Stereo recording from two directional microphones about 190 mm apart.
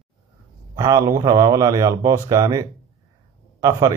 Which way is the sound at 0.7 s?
20° right (ahead or behind).